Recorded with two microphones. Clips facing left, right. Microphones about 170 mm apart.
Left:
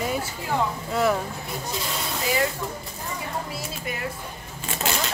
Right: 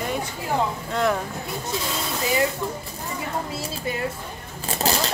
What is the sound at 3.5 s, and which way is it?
A woman's voice, 30° right (ahead or behind).